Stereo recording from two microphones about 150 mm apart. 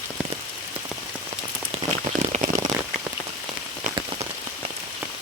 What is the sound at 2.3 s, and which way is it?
Rain on surface, 55° right (ahead or behind).